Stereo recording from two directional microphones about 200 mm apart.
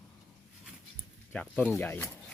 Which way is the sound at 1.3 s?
5° left (ahead or behind).